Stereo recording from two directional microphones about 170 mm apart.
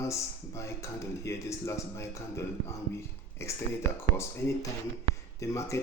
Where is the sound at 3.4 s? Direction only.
15° left (ahead or behind).